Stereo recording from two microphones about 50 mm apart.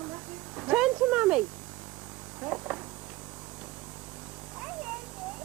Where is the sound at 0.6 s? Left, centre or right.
Centre.